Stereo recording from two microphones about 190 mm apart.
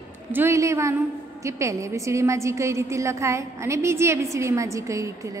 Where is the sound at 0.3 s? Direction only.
15° right (ahead or behind).